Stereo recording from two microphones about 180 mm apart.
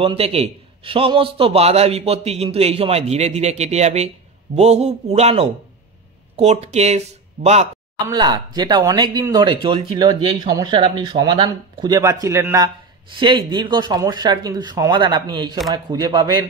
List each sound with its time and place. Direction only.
0.0 s a man's voice: 30° right (ahead or behind)
7.4 s speech: 55° right (ahead or behind)
8.1 s speech: 25° right (ahead or behind)